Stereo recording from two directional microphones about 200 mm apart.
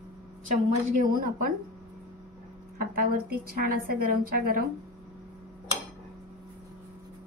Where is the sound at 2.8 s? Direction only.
50° right (ahead or behind).